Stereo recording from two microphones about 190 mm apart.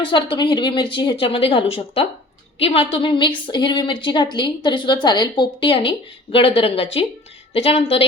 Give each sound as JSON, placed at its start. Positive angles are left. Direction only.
{"t": 0.0, "sound": "a woman's voice", "side_deg": 25}